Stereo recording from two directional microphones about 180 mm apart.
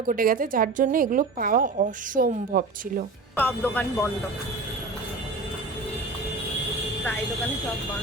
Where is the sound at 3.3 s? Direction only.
10° left (ahead or behind).